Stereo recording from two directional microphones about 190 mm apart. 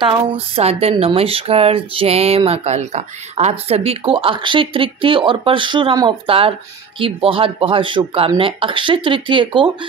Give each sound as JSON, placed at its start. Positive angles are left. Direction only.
{"t": 0.0, "sound": "speech", "side_deg": -25}